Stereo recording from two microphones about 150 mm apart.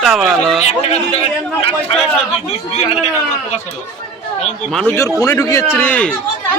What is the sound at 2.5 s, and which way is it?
Speech, 40° left (ahead or behind).